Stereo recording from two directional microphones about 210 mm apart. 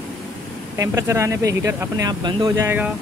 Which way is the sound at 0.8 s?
15° right (ahead or behind).